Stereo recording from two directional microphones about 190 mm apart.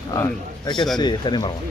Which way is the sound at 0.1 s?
20° left (ahead or behind).